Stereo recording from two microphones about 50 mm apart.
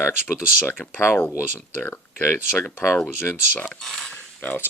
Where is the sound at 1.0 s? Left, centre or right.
Left.